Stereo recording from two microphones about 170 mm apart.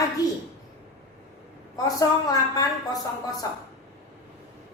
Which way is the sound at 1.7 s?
20° left (ahead or behind).